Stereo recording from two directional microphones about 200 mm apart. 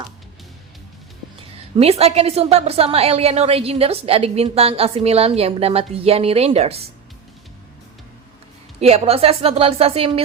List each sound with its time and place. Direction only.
1.4 s a woman's voice: 30° right (ahead or behind)
8.8 s a woman's voice: 30° right (ahead or behind)